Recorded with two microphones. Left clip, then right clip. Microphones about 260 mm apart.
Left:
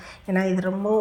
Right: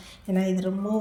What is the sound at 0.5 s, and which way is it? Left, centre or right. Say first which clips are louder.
Speech: left 5 dB; left.